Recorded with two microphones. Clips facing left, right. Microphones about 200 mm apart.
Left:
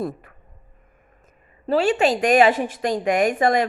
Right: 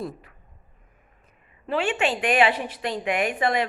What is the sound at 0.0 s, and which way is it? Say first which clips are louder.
Speech: left 5 dB; 55° left (ahead or behind).